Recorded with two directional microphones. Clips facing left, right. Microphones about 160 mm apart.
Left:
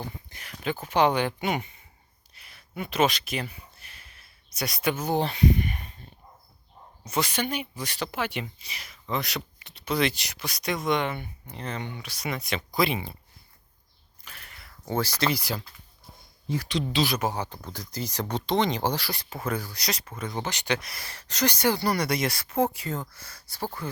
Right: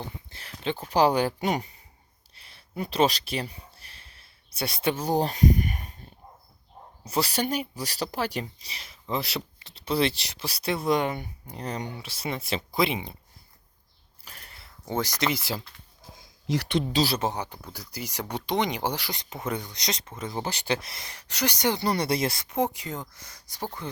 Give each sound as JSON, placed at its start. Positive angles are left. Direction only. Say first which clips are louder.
{"t": 0.0, "sound": "speech", "louder": "left 1 dB", "side_deg": -25}
{"t": 7.0, "sound": "speech", "louder": "right 1 dB", "side_deg": -35}
{"t": 12.8, "sound": "speech", "louder": "even", "side_deg": -20}
{"t": 14.3, "sound": "a sound", "louder": "even", "side_deg": -35}
{"t": 14.6, "sound": "speech", "louder": "left 1 dB", "side_deg": -20}
{"t": 16.1, "sound": "a sound", "louder": "right 3 dB", "side_deg": -90}
{"t": 16.9, "sound": "speech", "louder": "left 2 dB", "side_deg": -35}